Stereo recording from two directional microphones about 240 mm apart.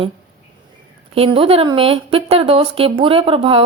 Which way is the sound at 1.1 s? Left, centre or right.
Right.